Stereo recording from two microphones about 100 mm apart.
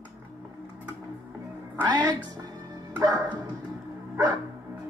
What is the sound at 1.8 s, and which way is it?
Music, 45° right (ahead or behind).